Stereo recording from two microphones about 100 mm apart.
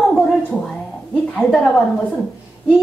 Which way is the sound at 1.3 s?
5° left (ahead or behind).